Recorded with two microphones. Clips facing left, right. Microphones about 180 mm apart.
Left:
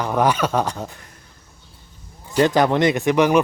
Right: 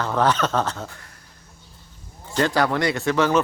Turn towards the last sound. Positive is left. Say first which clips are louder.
# left 4 dB
turn(degrees=15)  # may be behind; listen again after turning